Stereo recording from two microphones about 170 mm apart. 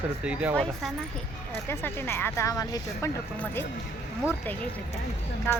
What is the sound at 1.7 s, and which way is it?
Speech, 15° left (ahead or behind).